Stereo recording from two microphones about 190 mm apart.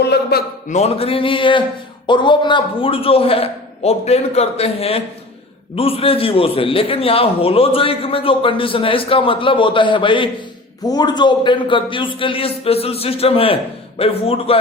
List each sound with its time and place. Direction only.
0.0 s a man's voice: 60° left (ahead or behind)
0.7 s a man's voice: 35° left (ahead or behind)